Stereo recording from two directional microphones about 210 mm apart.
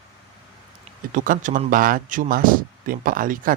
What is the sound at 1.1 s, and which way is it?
A man's voice, 40° right (ahead or behind).